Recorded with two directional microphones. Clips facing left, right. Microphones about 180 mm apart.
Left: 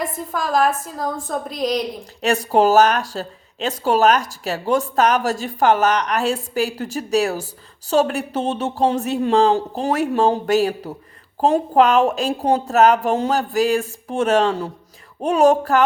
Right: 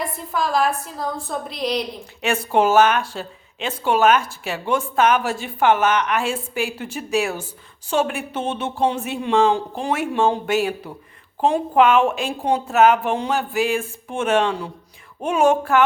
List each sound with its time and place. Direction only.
0.0 s a woman's voice: 45° left (ahead or behind)